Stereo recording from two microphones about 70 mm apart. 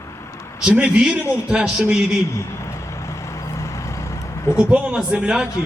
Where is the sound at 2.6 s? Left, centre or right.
Left.